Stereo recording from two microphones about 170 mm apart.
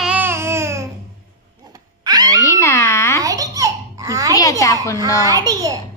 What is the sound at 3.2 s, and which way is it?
Babbling, 20° right (ahead or behind).